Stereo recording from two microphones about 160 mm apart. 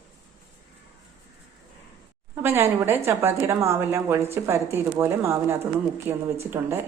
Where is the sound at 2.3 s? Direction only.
15° right (ahead or behind).